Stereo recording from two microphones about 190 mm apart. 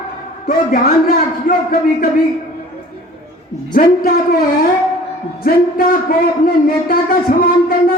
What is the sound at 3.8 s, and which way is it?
Speech, 45° left (ahead or behind).